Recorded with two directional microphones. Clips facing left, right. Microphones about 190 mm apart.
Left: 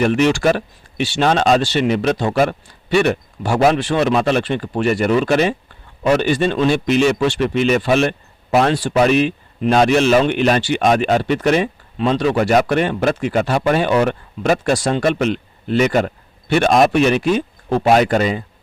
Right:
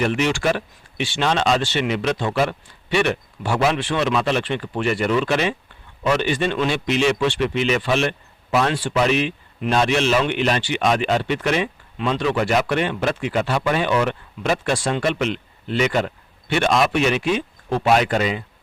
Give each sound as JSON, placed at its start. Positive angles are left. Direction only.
{"t": 0.0, "sound": "speech", "side_deg": 45}